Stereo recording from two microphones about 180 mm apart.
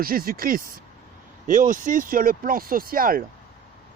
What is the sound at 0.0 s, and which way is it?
Speech, 55° right (ahead or behind).